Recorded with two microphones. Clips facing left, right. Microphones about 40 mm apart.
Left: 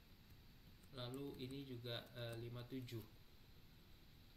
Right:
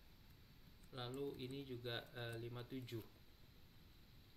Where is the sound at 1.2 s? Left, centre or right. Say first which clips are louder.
Right 4 dB; centre.